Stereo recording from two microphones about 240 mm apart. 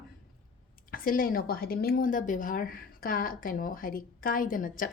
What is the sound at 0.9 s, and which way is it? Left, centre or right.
A woman's voice, left.